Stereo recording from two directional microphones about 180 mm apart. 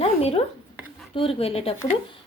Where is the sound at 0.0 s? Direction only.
35° left (ahead or behind).